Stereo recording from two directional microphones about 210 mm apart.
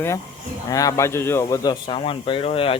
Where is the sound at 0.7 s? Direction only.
15° left (ahead or behind).